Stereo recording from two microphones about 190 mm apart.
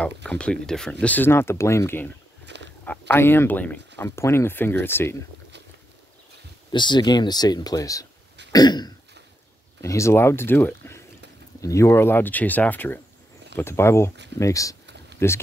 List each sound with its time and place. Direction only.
0.0 s speech: 5° left (ahead or behind)
2.4 s a sound: 65° right (ahead or behind)
2.8 s speech: 10° left (ahead or behind)
6.7 s speech: 25° left (ahead or behind)
8.5 s throat clearing: 20° left (ahead or behind)
9.8 s speech: 15° left (ahead or behind)